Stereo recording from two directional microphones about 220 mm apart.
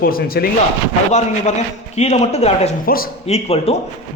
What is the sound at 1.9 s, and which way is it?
Speech, 30° left (ahead or behind).